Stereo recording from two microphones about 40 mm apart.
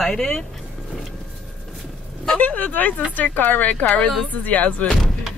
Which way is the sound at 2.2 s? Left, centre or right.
Left.